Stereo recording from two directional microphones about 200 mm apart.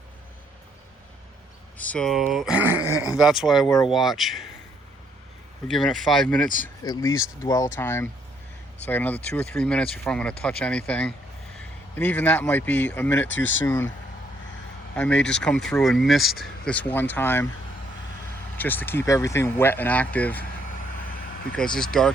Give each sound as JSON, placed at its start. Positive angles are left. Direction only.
{"t": 1.8, "sound": "speech", "side_deg": 5}
{"t": 5.6, "sound": "speech", "side_deg": 0}
{"t": 6.8, "sound": "speech", "side_deg": 15}
{"t": 13.2, "sound": "speech", "side_deg": 70}
{"t": 13.7, "sound": "speech", "side_deg": 10}
{"t": 14.9, "sound": "speech", "side_deg": 5}
{"t": 18.5, "sound": "speech", "side_deg": 10}
{"t": 20.4, "sound": "vehicle", "side_deg": 45}
{"t": 21.5, "sound": "speech", "side_deg": 5}